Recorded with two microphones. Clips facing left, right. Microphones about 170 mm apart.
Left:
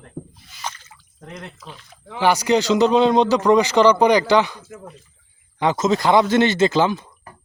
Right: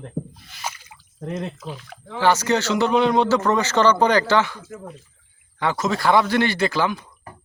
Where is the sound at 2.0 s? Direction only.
15° left (ahead or behind).